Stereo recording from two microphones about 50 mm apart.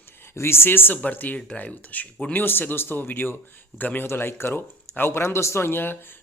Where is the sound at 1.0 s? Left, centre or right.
Left.